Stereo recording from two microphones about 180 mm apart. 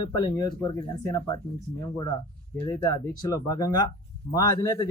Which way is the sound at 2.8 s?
20° left (ahead or behind).